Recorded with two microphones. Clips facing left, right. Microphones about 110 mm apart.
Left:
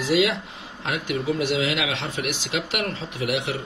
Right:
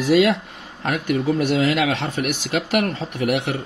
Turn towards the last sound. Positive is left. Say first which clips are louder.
# right 4 dB
turn(degrees=-55)  # may be behind; listen again after turning